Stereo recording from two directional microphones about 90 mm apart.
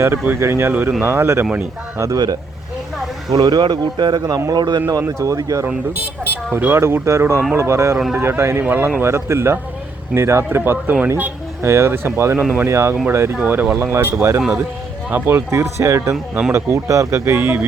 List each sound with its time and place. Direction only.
0.0 s speech: 30° right (ahead or behind)
2.0 s speech: 40° right (ahead or behind)
3.3 s a man's voice: 50° right (ahead or behind)
4.9 s speech: 35° right (ahead or behind)
6.7 s speech: 30° right (ahead or behind)
13.3 s speech: 20° right (ahead or behind)